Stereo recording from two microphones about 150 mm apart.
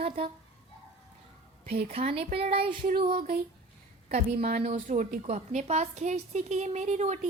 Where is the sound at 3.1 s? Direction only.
65° right (ahead or behind).